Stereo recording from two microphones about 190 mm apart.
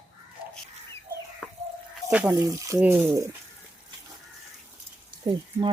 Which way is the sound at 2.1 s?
10° right (ahead or behind).